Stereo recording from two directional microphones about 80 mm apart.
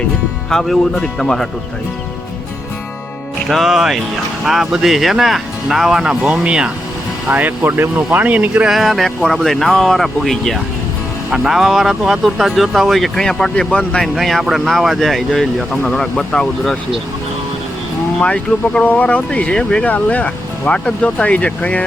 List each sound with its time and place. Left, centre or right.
0.5 s speech: centre
3.5 s speech: centre
8.7 s speech: centre
14.2 s speech: centre
18.2 s speech: centre